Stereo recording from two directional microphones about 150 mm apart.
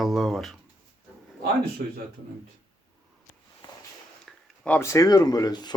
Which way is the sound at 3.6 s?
30° left (ahead or behind).